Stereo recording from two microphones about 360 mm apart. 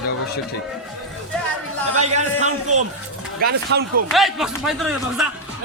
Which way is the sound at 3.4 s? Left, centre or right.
Right.